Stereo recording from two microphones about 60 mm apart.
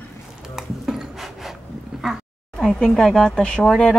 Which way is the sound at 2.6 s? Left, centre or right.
Centre.